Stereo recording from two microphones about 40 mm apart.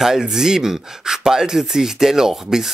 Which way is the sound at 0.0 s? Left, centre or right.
Centre.